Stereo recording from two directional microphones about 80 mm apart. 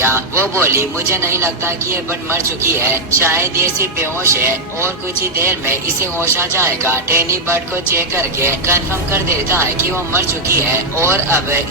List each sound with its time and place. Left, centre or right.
0.0 s speech: right